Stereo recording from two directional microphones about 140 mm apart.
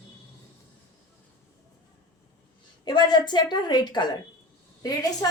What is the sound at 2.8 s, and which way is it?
A woman's voice, 30° left (ahead or behind).